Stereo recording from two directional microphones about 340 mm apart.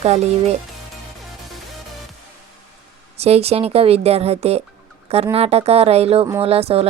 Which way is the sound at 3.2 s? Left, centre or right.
Centre.